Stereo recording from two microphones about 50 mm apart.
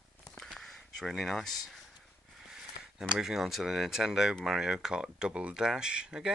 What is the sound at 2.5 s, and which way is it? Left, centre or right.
Speech, centre.